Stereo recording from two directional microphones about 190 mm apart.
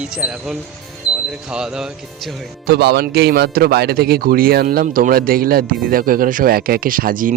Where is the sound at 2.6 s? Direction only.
60° right (ahead or behind).